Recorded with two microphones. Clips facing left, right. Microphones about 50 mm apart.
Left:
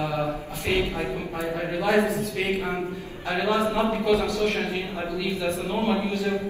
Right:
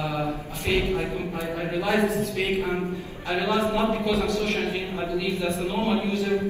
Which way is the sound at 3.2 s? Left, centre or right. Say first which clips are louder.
Even; left.